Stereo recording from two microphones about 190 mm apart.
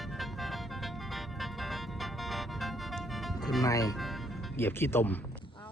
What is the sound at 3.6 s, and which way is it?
Speech, 20° left (ahead or behind).